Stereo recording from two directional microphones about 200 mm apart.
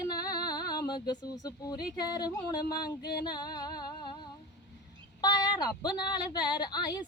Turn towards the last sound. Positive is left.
turn(degrees=20)  # may be behind; listen again after turning